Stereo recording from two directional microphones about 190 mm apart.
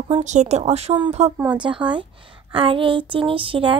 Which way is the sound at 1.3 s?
10° right (ahead or behind).